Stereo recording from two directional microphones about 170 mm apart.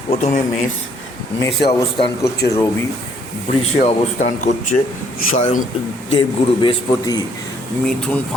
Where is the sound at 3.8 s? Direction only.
45° left (ahead or behind).